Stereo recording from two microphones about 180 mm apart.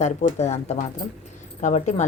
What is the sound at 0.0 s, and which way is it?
Speech, 40° left (ahead or behind).